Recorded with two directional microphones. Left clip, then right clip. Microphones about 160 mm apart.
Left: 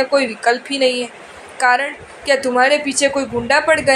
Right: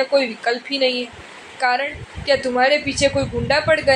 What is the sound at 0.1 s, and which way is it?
A woman's voice, 50° left (ahead or behind).